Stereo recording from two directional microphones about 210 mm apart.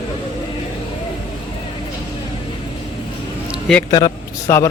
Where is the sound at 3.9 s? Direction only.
15° left (ahead or behind).